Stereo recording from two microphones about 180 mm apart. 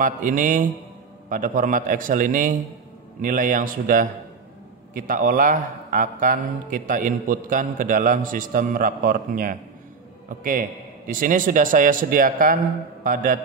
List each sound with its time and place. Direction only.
0.0 s a man's voice: 45° right (ahead or behind)